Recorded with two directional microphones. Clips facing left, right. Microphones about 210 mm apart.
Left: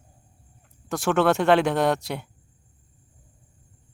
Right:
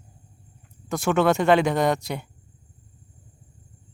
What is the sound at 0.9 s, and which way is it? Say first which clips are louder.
Speech: even; centre (ahead or behind).